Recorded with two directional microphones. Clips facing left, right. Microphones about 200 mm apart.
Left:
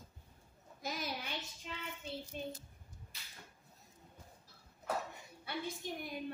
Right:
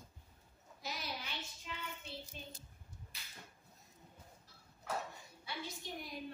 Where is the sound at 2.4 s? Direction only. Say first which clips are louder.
Left 10 dB; 55° left (ahead or behind).